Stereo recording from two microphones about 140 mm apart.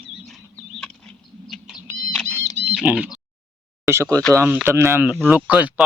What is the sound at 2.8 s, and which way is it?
Speech, 10° right (ahead or behind).